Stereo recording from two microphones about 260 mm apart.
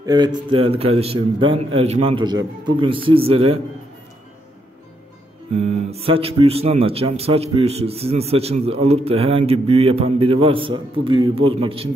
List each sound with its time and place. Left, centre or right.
0.0 s speech: centre
5.5 s speech: right